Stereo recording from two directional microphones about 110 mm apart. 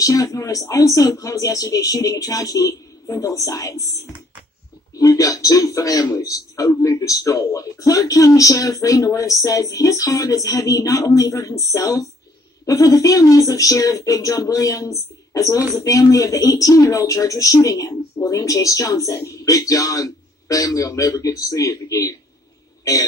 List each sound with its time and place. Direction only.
0.0 s speech: 30° left (ahead or behind)
4.9 s speech: 30° left (ahead or behind)